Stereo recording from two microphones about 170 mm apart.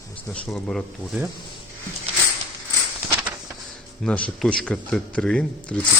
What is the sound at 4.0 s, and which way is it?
A man's voice, 5° left (ahead or behind).